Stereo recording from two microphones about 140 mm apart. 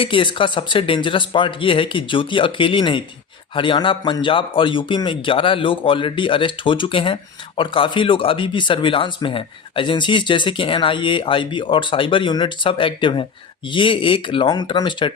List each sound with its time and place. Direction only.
0.0 s speech: 40° left (ahead or behind)